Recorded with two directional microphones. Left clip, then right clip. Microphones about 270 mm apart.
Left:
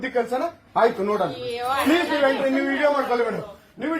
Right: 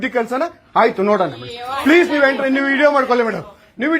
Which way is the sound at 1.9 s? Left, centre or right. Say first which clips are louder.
Right 10 dB; right.